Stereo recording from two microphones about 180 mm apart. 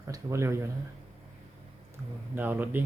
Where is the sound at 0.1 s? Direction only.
15° right (ahead or behind).